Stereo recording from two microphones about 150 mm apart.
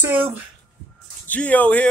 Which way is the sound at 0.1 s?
10° right (ahead or behind).